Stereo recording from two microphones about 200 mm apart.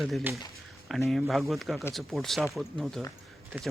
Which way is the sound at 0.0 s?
Centre (ahead or behind).